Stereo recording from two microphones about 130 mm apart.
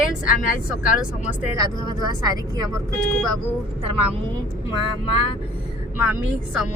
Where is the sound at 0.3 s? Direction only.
90° left.